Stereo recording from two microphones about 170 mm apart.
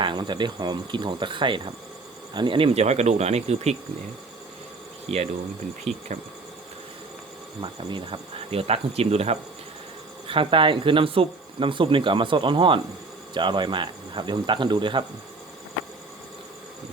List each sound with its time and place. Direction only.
0.0 s speech: 25° right (ahead or behind)
5.0 s speech: 35° right (ahead or behind)
5.9 s insect: centre (ahead or behind)
7.6 s speech: 30° right (ahead or behind)